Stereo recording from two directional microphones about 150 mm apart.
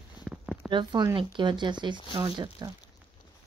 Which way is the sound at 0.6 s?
30° right (ahead or behind).